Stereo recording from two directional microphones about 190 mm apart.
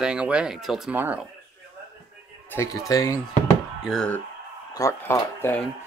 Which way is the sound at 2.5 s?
15° left (ahead or behind).